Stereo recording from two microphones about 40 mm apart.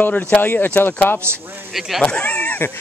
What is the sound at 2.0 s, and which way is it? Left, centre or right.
Speech, left.